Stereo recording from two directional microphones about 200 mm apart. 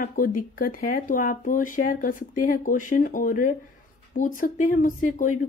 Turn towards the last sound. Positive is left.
turn(degrees=40)  # may be behind; listen again after turning